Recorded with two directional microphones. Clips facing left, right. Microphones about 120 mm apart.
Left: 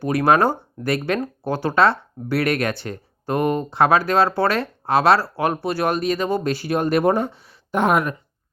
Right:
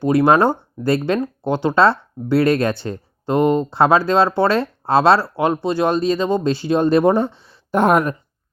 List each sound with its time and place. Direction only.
0.0 s speech: 25° right (ahead or behind)